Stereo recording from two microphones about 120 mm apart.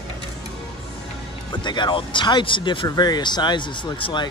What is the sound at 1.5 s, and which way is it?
Speech, 40° left (ahead or behind).